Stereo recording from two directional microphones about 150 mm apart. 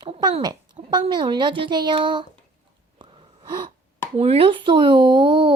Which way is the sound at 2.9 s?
35° right (ahead or behind).